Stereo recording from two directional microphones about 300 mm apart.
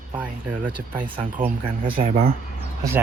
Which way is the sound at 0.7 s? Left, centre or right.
Centre.